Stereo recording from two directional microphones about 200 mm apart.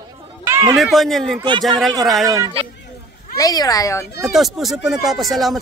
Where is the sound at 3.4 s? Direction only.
20° left (ahead or behind).